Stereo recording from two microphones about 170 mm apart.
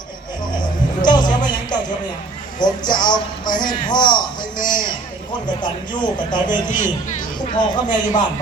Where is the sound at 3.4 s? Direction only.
50° left (ahead or behind).